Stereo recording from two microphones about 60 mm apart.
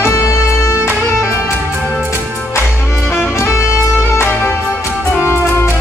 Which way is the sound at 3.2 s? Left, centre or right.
Left.